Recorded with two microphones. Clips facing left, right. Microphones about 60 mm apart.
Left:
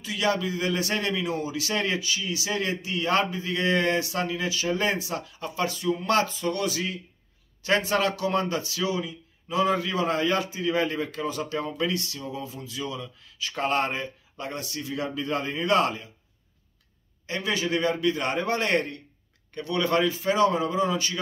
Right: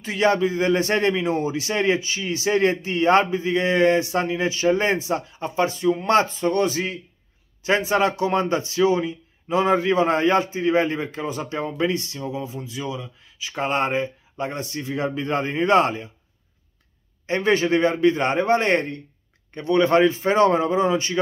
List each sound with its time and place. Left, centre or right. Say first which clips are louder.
0.0 s a man's voice: right 6 dB; right
7.6 s speech: right 4 dB; right
17.3 s a man's voice: right 8 dB; right